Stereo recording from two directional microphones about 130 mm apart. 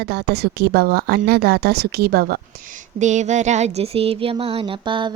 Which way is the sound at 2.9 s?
65° right (ahead or behind).